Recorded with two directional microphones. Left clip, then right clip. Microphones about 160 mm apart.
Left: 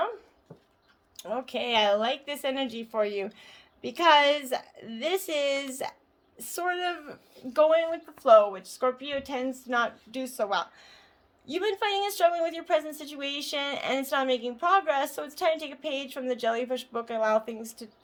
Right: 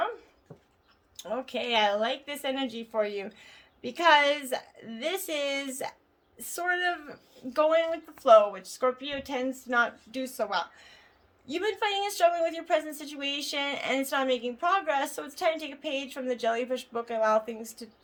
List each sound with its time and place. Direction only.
1.1 s a woman's voice: 35° left (ahead or behind)